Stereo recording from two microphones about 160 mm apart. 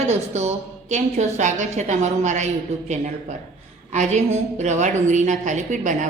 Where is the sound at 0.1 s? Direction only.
45° right (ahead or behind).